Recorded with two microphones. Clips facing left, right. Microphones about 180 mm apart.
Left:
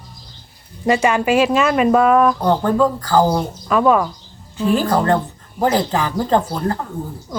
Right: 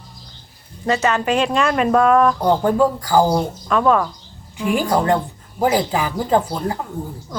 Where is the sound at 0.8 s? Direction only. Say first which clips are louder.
Left 3 dB; 15° left (ahead or behind).